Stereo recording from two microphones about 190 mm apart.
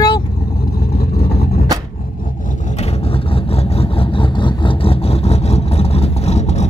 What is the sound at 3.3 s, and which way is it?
Vehicle, 30° left (ahead or behind).